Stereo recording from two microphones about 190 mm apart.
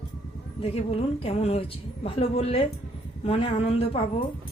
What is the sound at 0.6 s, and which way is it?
A woman's voice, 30° left (ahead or behind).